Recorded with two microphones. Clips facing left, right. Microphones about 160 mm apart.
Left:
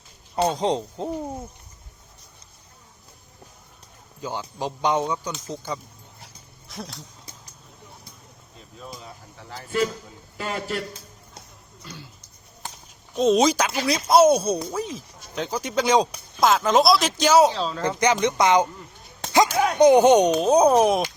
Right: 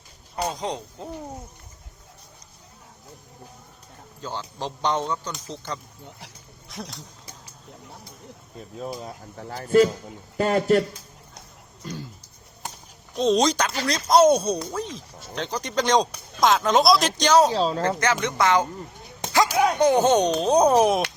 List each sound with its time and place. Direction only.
0.3 s speech: 30° left (ahead or behind)
4.2 s speech: 10° left (ahead or behind)
6.1 s speech: 75° right (ahead or behind)
6.7 s speech: centre (ahead or behind)
8.8 s speech: 45° right (ahead or behind)
11.8 s a sound: 45° right (ahead or behind)
13.1 s speech: 5° left (ahead or behind)
17.5 s speech: 40° right (ahead or behind)
17.8 s speech: 15° left (ahead or behind)
19.5 s speech: centre (ahead or behind)
19.8 s speech: 15° left (ahead or behind); by 21.0 s centre (ahead or behind)